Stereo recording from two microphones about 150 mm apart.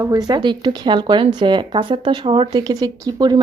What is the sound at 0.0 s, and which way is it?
Speech, 25° right (ahead or behind).